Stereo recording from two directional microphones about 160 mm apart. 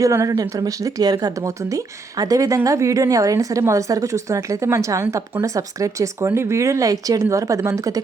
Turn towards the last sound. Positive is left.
turn(degrees=-20)  # may be behind; listen again after turning